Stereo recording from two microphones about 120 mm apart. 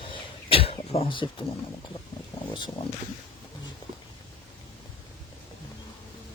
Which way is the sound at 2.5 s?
40° left (ahead or behind).